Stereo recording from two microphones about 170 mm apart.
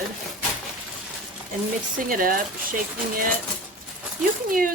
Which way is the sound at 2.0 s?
55° right (ahead or behind).